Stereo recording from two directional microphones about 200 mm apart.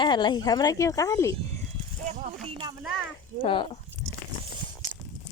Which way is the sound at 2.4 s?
25° right (ahead or behind).